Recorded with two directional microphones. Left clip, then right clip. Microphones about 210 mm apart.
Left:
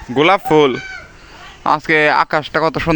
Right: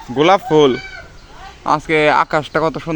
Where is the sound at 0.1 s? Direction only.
15° left (ahead or behind).